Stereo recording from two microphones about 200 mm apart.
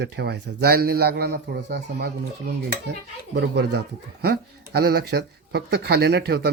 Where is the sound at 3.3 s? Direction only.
60° right (ahead or behind).